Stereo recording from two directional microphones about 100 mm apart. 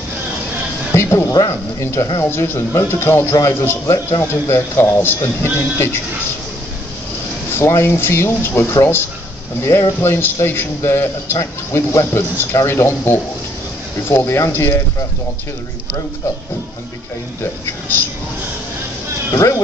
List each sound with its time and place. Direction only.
0.9 s a man's voice: 25° left (ahead or behind)
7.5 s a man's voice: 25° left (ahead or behind)
19.3 s a man's voice: 30° left (ahead or behind)